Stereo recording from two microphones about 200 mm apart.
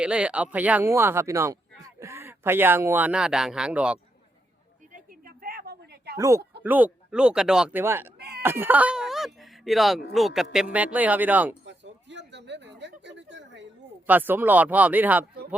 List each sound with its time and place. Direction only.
0.0 s speech: 5° right (ahead or behind)
4.9 s a sound: 45° right (ahead or behind)
6.1 s speech: 15° right (ahead or behind)
8.4 s whimper: 10° right (ahead or behind)
10.1 s speech: centre (ahead or behind)
11.6 s a sound: 65° right (ahead or behind)
14.1 s speech: 10° right (ahead or behind)